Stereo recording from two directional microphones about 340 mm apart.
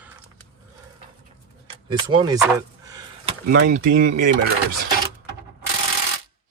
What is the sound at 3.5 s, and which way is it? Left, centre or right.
Speech, right.